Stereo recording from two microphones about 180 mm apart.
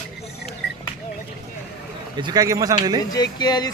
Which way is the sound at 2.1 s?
25° right (ahead or behind).